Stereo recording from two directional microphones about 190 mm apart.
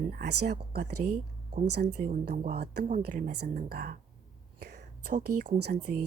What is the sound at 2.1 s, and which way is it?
Speech, 40° right (ahead or behind).